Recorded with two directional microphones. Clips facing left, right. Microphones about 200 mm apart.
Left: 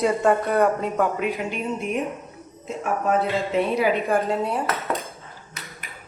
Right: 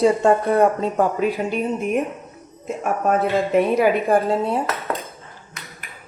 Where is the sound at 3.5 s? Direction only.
50° right (ahead or behind).